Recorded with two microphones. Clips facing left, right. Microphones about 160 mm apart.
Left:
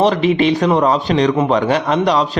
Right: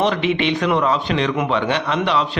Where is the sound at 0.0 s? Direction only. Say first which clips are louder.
Left 5 dB; 35° left (ahead or behind).